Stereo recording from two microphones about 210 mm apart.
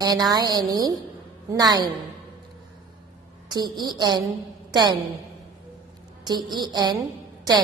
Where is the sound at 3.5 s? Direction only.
20° right (ahead or behind).